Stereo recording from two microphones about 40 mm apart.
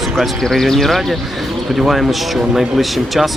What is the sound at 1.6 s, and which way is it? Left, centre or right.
Speech, centre.